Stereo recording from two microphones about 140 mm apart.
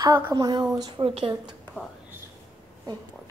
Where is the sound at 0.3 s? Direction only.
30° right (ahead or behind).